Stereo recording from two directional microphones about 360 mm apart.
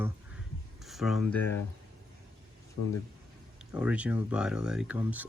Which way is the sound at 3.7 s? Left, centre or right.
Centre.